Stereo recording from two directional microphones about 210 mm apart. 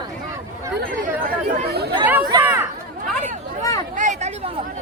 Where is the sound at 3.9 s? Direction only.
35° right (ahead or behind).